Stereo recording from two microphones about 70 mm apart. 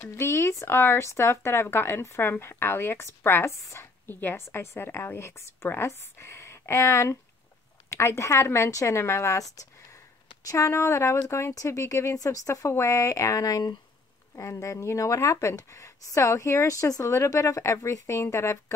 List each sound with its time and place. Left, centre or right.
0.0 s a woman's voice: left
10.5 s speech: left
14.3 s speech: left